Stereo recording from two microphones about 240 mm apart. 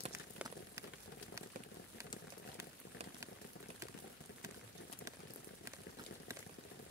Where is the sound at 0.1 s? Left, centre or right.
Centre.